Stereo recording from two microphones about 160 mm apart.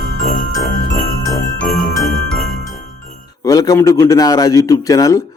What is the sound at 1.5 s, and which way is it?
Jingle bell, 5° left (ahead or behind).